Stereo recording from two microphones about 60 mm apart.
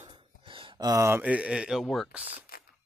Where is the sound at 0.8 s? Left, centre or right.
Right.